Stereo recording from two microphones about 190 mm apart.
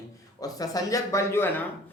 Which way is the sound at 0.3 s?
20° left (ahead or behind).